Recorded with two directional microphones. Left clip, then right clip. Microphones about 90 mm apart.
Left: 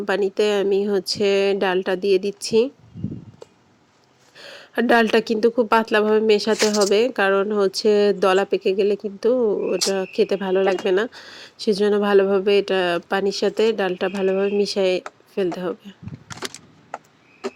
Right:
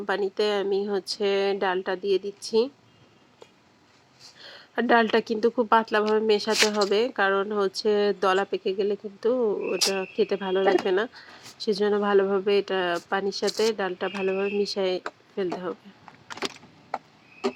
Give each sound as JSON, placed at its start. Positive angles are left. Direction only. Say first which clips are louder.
{"t": 0.0, "sound": "speech", "louder": "left 5 dB", "side_deg": 45}
{"t": 4.4, "sound": "speech", "louder": "left 5 dB", "side_deg": 50}
{"t": 6.5, "sound": "speech", "louder": "left 4 dB", "side_deg": 30}
{"t": 9.3, "sound": "speech", "louder": "left 5 dB", "side_deg": 40}
{"t": 12.5, "sound": "speech", "louder": "left 5 dB", "side_deg": 60}
{"t": 13.4, "sound": "speech", "louder": "left 6 dB", "side_deg": 45}
{"t": 14.1, "sound": "speech", "louder": "left 6 dB", "side_deg": 35}
{"t": 14.6, "sound": "speech", "louder": "left 6 dB", "side_deg": 55}
{"t": 15.4, "sound": "speech", "louder": "left 6 dB", "side_deg": 45}
{"t": 16.3, "sound": "a sound", "louder": "even", "side_deg": 30}